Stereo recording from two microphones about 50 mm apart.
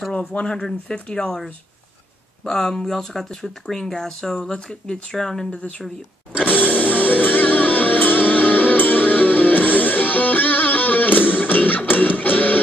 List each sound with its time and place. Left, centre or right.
0.1 s speech: left
2.4 s speech: centre
5.5 s speech: left
6.5 s music: left